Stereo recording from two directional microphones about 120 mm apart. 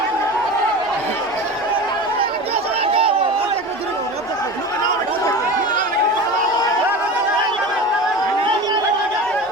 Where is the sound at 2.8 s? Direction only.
50° right (ahead or behind).